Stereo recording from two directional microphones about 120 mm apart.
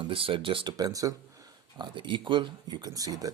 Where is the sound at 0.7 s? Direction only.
30° right (ahead or behind).